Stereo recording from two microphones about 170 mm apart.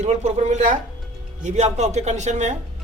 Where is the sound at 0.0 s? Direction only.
40° right (ahead or behind).